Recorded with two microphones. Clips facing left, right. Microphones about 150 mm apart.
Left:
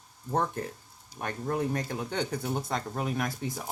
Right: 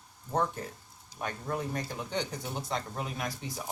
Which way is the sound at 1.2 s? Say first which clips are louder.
Left 4 dB; 50° left (ahead or behind).